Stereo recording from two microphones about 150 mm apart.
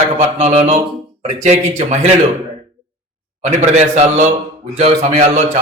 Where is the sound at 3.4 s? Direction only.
50° right (ahead or behind).